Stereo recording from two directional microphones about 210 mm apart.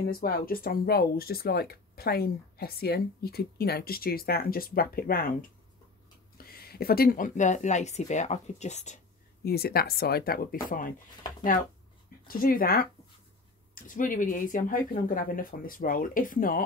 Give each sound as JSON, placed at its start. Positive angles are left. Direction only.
{"t": 0.0, "sound": "speech", "side_deg": 45}
{"t": 9.4, "sound": "speech", "side_deg": 45}
{"t": 12.3, "sound": "speech", "side_deg": 45}